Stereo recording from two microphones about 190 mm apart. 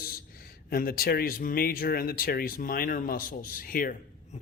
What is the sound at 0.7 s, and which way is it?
A man's voice, 50° left (ahead or behind).